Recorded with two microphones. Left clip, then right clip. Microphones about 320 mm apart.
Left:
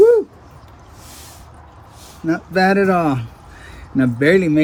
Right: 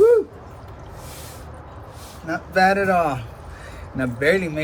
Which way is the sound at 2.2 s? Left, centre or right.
Left.